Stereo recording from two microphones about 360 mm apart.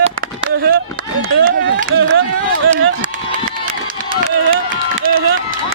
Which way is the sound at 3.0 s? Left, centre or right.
Right.